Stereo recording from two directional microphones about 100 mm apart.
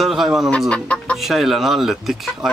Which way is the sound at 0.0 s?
5° right (ahead or behind).